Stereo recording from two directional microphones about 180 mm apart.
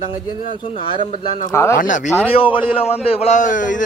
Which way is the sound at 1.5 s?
15° left (ahead or behind).